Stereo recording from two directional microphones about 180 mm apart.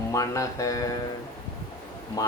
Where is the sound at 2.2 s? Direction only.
20° left (ahead or behind).